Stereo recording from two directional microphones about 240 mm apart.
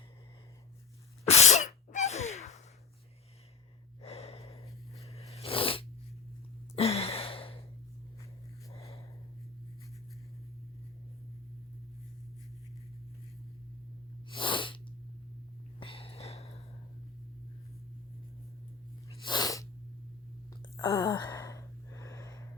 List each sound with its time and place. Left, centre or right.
1.2 s sneeze: left
4.0 s gasp: left
5.3 s sneeze: left
6.7 s a sound: left
8.7 s a sound: left
14.3 s sneeze: left
15.8 s a sound: left
19.2 s sneeze: centre
20.7 s sigh: centre